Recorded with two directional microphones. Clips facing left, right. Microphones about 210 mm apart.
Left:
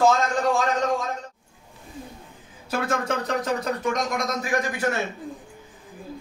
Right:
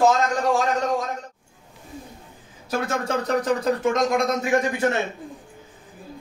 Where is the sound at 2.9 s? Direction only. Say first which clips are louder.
Right 2 dB; 30° right (ahead or behind).